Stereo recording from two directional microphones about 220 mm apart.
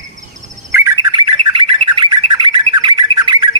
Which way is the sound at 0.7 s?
15° right (ahead or behind).